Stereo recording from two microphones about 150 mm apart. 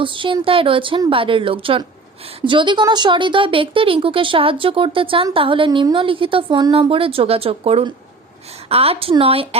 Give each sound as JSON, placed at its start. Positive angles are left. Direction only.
{"t": 0.0, "sound": "speech", "side_deg": -35}